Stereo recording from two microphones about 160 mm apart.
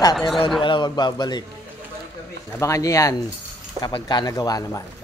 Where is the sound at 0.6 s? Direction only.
30° left (ahead or behind).